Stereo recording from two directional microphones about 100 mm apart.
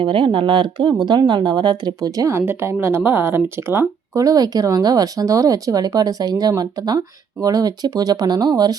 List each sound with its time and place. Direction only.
0.0 s speech: 60° right (ahead or behind); by 2.4 s 35° right (ahead or behind)
2.4 s speech: 25° right (ahead or behind)
4.2 s speech: 35° right (ahead or behind)